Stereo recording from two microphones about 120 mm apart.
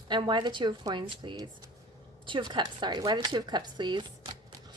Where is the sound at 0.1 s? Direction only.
40° right (ahead or behind).